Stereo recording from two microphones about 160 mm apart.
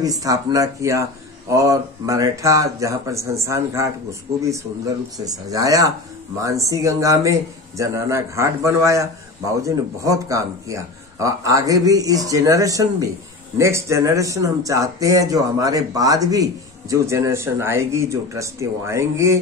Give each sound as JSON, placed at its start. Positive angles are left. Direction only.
{"t": 0.0, "sound": "speech", "side_deg": -20}